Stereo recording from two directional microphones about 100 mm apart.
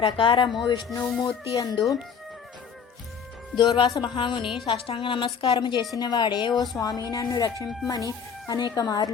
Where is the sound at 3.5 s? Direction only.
50° left (ahead or behind).